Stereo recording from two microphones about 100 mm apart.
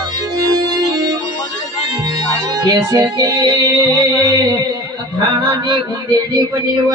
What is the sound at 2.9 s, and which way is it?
Music, 45° right (ahead or behind).